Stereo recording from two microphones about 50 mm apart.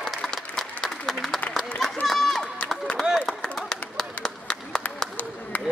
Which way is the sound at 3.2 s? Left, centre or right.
Centre.